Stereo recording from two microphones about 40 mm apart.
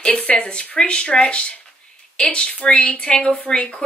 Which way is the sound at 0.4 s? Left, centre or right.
Left.